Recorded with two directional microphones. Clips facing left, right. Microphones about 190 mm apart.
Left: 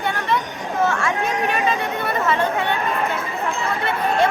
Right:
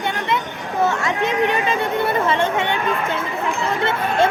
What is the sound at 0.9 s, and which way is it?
Speech, 20° right (ahead or behind).